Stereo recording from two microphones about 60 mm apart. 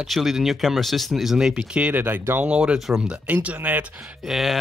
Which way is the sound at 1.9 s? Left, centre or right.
Right.